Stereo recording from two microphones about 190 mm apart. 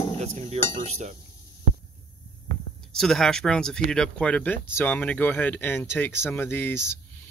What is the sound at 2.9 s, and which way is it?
Speech, 5° left (ahead or behind).